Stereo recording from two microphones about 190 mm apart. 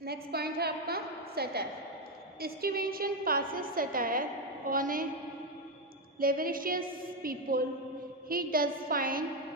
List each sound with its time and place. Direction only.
0.0 s a woman's voice: 55° right (ahead or behind)
6.1 s a woman's voice: 50° right (ahead or behind)